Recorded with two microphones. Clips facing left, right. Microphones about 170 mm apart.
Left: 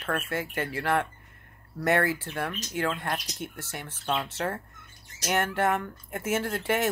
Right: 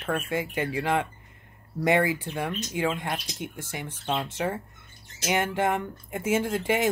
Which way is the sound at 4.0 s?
25° right (ahead or behind).